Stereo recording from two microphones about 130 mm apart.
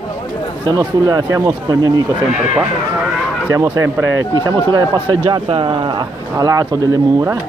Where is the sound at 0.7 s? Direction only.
30° right (ahead or behind).